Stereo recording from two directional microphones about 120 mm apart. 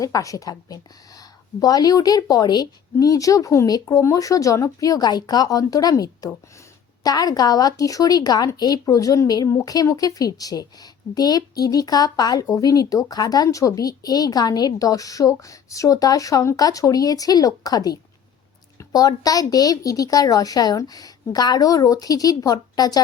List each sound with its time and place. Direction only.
0.0 s speech: 30° left (ahead or behind)